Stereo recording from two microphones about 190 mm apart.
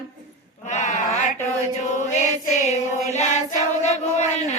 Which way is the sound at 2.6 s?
35° left (ahead or behind).